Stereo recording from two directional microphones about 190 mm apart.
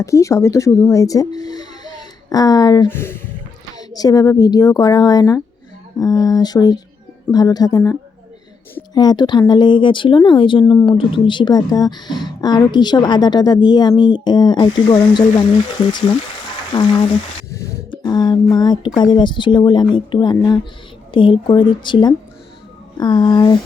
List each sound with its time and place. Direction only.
0.0 s speech: 15° left (ahead or behind)
17.5 s a sound: 15° left (ahead or behind)
18.5 s speech: 20° left (ahead or behind)